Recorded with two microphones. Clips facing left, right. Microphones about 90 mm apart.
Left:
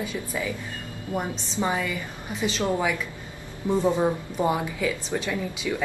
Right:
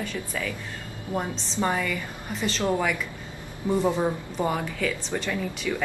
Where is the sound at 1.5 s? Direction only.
10° left (ahead or behind).